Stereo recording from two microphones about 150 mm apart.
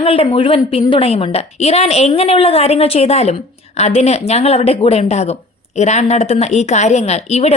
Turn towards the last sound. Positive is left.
turn(degrees=45)  # may be behind; listen again after turning